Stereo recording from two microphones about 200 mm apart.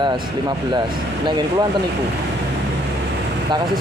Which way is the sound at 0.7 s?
20° right (ahead or behind).